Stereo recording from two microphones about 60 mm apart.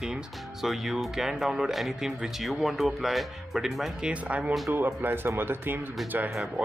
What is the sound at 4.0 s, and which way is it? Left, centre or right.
Speech, right.